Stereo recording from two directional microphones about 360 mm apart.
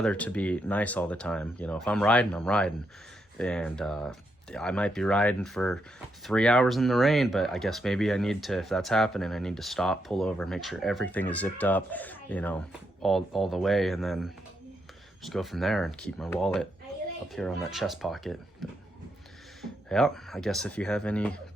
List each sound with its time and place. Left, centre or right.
0.0 s speech: centre
19.9 s speech: centre